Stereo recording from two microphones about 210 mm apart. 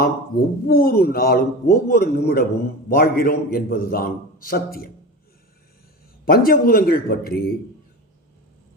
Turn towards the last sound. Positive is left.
turn(degrees=45)  # may be behind; listen again after turning